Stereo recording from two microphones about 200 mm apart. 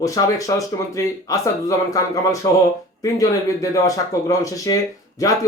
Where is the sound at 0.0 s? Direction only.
15° left (ahead or behind).